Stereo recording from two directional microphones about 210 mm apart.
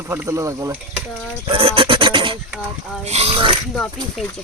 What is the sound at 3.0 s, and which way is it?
Speech, 30° right (ahead or behind).